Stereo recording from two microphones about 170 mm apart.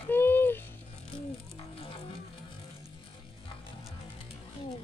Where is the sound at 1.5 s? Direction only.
35° left (ahead or behind).